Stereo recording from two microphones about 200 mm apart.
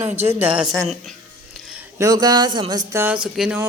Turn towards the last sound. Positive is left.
turn(degrees=-5)  # may be behind; listen again after turning